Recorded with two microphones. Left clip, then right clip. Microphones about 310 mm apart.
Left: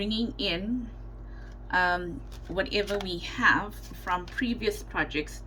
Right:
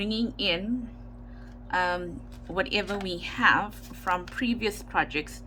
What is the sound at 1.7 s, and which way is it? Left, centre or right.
A woman's voice, centre.